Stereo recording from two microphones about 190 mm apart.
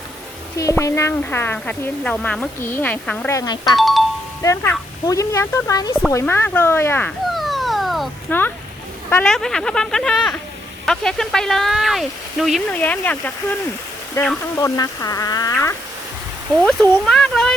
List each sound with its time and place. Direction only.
0.5 s a woman's voice: 15° left (ahead or behind)
3.8 s speech: centre (ahead or behind)
4.4 s a woman's voice: 15° left (ahead or behind)
7.3 s a sound: centre (ahead or behind)
8.3 s a woman's voice: 10° left (ahead or behind)
16.6 s speech: 5° left (ahead or behind)